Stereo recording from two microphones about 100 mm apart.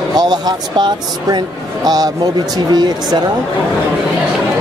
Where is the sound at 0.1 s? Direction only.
40° right (ahead or behind).